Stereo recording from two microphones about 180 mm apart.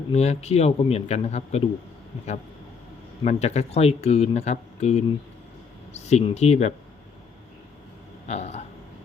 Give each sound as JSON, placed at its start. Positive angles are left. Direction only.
{"t": 0.1, "sound": "speech", "side_deg": 35}
{"t": 3.2, "sound": "speech", "side_deg": 35}
{"t": 8.3, "sound": "speech", "side_deg": 35}